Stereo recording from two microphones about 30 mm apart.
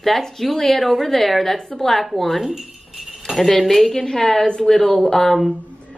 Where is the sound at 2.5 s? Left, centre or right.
Centre.